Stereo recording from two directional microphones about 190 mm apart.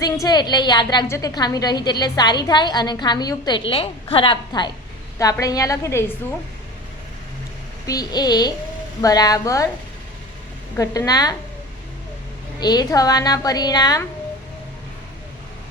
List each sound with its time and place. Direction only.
0.0 s a woman's voice: 20° left (ahead or behind)
7.9 s a woman's voice: 20° left (ahead or behind)
10.8 s a woman's voice: 20° left (ahead or behind)
12.5 s a woman's voice: 20° left (ahead or behind)